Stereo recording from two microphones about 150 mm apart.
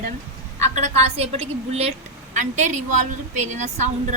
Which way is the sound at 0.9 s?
45° right (ahead or behind).